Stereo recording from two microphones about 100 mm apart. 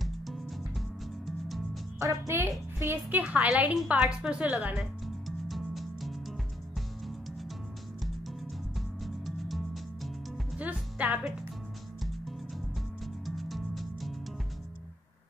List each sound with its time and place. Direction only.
0.0 s music: centre (ahead or behind)
2.0 s a woman's voice: 30° right (ahead or behind)
5.0 s music: centre (ahead or behind)
8.7 s music: centre (ahead or behind)
10.6 s music: 15° right (ahead or behind)
13.0 s music: centre (ahead or behind)